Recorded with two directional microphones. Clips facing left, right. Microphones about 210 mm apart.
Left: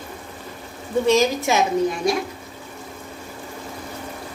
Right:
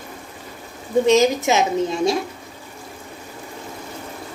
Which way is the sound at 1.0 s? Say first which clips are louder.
Right 2 dB; 20° right (ahead or behind).